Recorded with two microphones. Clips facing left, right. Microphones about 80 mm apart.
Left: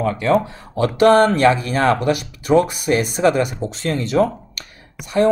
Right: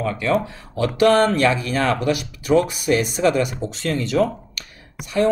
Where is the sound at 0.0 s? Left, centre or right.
Left.